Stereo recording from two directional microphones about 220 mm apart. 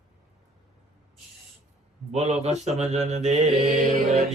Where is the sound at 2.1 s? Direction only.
30° right (ahead or behind).